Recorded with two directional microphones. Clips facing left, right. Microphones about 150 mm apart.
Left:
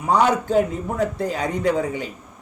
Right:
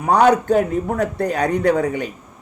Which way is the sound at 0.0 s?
60° right (ahead or behind).